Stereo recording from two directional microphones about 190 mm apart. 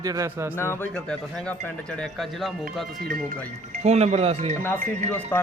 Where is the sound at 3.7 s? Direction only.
35° right (ahead or behind).